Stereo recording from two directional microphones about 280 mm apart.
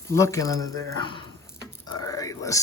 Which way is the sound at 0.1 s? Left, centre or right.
Centre.